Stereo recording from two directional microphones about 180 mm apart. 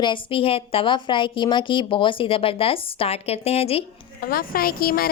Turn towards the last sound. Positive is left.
turn(degrees=55)  # may be behind; listen again after turning